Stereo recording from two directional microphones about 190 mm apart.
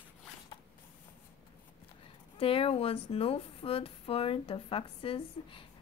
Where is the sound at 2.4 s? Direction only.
30° left (ahead or behind).